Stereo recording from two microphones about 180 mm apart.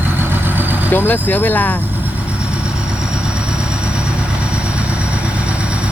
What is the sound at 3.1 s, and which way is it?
Vehicle, 5° right (ahead or behind).